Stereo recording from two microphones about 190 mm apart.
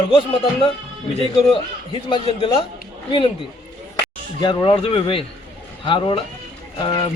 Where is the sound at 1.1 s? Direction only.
30° left (ahead or behind).